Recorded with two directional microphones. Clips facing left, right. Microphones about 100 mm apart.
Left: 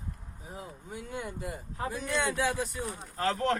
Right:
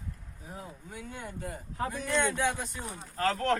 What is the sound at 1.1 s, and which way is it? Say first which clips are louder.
Speech: left 3 dB; 15° left (ahead or behind).